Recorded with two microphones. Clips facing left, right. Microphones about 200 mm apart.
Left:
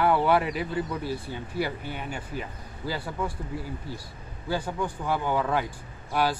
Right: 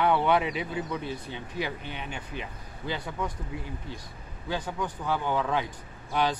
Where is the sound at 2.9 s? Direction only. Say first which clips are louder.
Left 1 dB; 5° left (ahead or behind).